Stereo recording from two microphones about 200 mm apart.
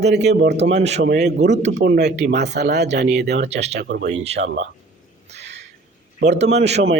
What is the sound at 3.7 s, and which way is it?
Speech, 55° right (ahead or behind).